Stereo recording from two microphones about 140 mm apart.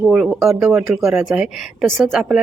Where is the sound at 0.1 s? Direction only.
5° right (ahead or behind).